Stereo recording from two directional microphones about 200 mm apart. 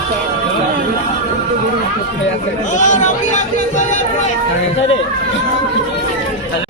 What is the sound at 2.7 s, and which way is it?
Speech, 40° left (ahead or behind).